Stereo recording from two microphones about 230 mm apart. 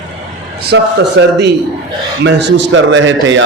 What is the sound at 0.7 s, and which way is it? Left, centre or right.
A man's voice, right.